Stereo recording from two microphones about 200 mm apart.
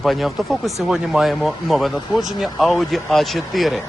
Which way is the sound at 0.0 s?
Centre (ahead or behind).